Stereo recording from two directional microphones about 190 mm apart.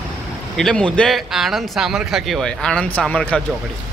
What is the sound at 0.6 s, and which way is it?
A man's voice, 5° left (ahead or behind).